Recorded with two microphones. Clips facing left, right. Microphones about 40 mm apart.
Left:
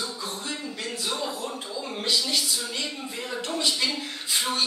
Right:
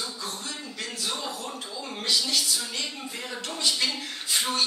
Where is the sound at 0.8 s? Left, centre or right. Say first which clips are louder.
Left 2 dB; centre.